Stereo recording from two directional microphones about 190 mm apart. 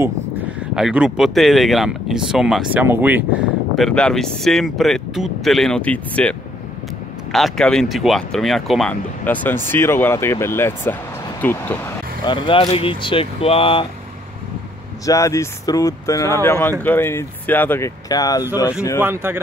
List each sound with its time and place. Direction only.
0.7 s speech: 5° right (ahead or behind)
3.7 s speech: 5° left (ahead or behind)
7.3 s speech: centre (ahead or behind)
12.3 s speech: 25° left (ahead or behind)
15.0 s speech: 15° left (ahead or behind)
18.9 s speech: 10° right (ahead or behind)